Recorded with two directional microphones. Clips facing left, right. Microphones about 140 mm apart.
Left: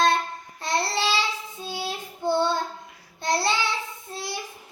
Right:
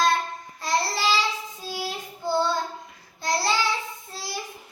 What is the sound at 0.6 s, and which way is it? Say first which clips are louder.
Child singing: even; 25° left (ahead or behind).